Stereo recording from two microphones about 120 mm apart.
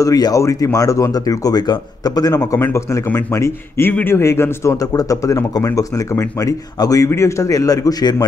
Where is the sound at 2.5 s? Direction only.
20° left (ahead or behind).